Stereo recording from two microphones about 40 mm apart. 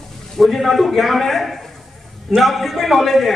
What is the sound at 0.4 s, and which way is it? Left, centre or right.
A man's voice, centre.